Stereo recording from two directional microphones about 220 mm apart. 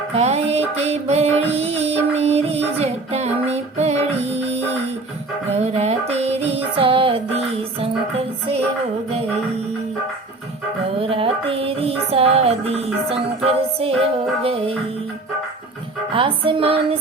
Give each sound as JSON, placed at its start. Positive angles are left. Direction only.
{"t": 0.2, "sound": "music", "side_deg": -30}
{"t": 5.6, "sound": "music", "side_deg": -30}
{"t": 11.0, "sound": "music", "side_deg": -25}
{"t": 16.1, "sound": "music", "side_deg": -25}